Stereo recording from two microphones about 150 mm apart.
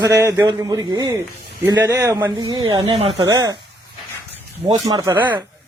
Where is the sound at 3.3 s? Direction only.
25° right (ahead or behind).